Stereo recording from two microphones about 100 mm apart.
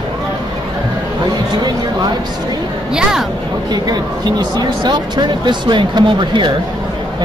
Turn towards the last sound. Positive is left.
turn(degrees=-55)  # may be behind; listen again after turning